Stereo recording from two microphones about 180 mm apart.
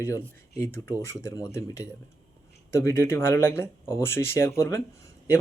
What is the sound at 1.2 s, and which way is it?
Speech, 15° left (ahead or behind).